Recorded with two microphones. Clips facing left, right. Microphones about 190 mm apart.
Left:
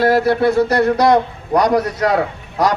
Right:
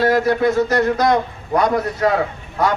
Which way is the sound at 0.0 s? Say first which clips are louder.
Left 2 dB; 35° left (ahead or behind).